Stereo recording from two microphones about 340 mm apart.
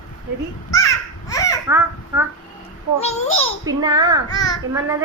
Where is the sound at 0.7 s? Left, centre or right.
Centre.